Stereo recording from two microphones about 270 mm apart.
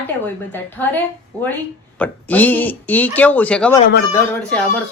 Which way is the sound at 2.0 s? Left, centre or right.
Centre.